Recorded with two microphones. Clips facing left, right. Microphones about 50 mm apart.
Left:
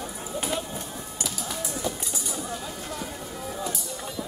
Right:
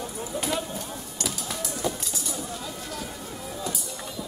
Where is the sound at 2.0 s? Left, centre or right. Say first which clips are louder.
Even; centre.